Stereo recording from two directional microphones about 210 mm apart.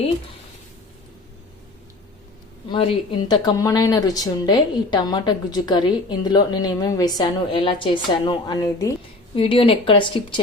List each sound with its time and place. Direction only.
2.6 s speech: 25° left (ahead or behind)